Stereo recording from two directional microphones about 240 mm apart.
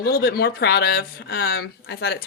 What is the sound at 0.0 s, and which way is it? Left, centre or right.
A woman's voice, left.